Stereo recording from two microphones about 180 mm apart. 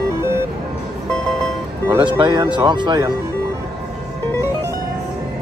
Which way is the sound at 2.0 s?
25° right (ahead or behind).